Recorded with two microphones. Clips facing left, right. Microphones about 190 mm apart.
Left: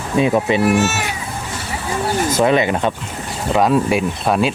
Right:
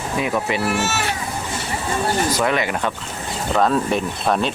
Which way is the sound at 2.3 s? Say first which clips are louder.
Left 5 dB; 20° left (ahead or behind).